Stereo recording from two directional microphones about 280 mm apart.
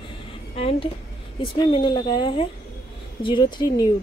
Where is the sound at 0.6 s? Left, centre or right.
Left.